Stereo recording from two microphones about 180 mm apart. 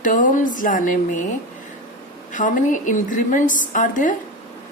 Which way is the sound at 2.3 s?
45° left (ahead or behind).